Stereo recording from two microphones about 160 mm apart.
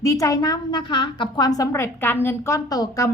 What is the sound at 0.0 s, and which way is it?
A woman's voice, 20° left (ahead or behind).